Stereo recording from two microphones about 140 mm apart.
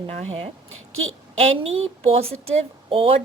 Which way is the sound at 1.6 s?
45° right (ahead or behind).